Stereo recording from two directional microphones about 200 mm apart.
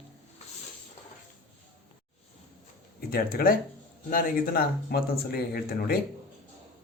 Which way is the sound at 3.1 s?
50° left (ahead or behind).